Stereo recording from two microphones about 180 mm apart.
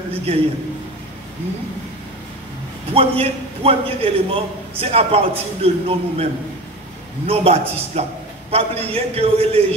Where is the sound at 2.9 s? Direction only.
35° right (ahead or behind).